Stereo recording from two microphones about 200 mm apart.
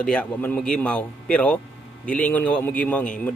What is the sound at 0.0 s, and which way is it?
Speech, 5° left (ahead or behind).